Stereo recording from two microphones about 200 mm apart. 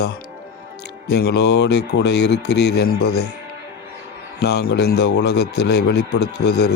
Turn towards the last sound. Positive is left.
turn(degrees=55)  # may be behind; listen again after turning